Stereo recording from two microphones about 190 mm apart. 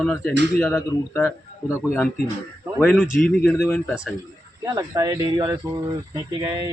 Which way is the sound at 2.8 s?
Centre (ahead or behind).